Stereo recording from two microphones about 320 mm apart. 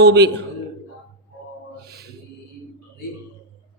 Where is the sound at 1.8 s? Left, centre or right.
Right.